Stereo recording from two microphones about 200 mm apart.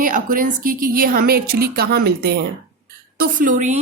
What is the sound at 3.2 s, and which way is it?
Speech, 40° right (ahead or behind).